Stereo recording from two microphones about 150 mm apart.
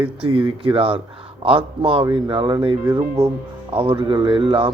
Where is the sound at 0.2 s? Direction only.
35° right (ahead or behind).